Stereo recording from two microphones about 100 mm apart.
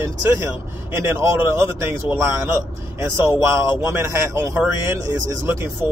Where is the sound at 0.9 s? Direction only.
25° right (ahead or behind).